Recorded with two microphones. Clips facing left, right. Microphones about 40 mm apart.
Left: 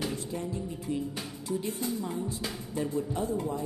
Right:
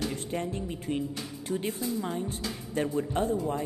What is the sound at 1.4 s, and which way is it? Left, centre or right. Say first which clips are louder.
Speech: right 1 dB; right.